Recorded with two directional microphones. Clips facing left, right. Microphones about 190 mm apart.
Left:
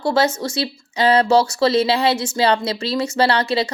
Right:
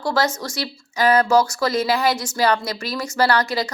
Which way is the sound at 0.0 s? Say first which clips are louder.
Left 3 dB; 25° left (ahead or behind).